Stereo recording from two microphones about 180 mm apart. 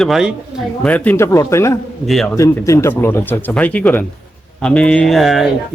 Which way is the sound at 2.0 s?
Centre (ahead or behind).